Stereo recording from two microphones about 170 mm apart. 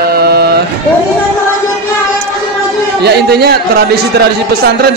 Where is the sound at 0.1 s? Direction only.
70° right (ahead or behind).